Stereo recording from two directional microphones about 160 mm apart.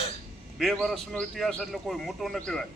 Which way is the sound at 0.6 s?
Centre (ahead or behind).